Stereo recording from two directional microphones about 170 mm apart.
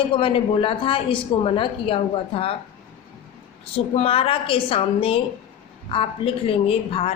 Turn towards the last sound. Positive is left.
turn(degrees=35)  # may be behind; listen again after turning